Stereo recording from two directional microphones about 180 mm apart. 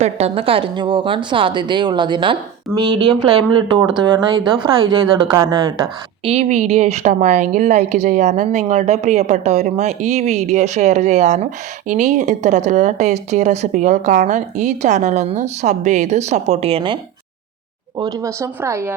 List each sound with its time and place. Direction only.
0.0 s a woman's voice: 35° right (ahead or behind)
6.2 s speech: 35° right (ahead or behind)
17.9 s speech: 20° right (ahead or behind)